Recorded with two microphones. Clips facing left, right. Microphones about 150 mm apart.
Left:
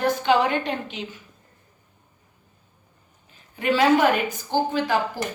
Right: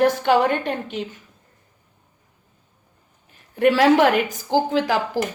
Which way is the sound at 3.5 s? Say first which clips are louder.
Right 4 dB; 65° right (ahead or behind).